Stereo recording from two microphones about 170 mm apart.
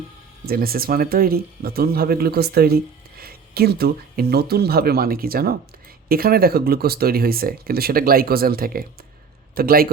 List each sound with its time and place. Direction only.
0.4 s speech: 60° right (ahead or behind)